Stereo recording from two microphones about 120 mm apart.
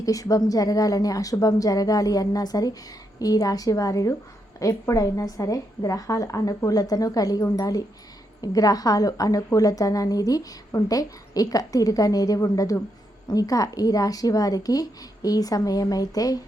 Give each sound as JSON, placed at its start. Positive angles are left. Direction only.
{"t": 0.0, "sound": "a woman's voice", "side_deg": 30}